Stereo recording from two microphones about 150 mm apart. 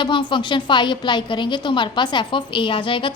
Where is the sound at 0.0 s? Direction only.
30° left (ahead or behind).